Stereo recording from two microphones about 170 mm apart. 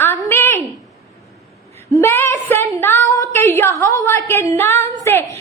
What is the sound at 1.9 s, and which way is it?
A woman's voice, 15° left (ahead or behind).